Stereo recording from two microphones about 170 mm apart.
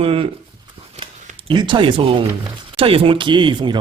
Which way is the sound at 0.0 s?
35° right (ahead or behind).